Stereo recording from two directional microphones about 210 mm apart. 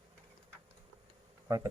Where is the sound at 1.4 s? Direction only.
15° right (ahead or behind).